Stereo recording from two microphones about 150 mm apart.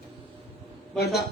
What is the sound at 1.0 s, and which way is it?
Speech, 90° left.